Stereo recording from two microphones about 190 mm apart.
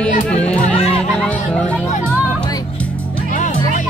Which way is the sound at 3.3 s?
40° left (ahead or behind).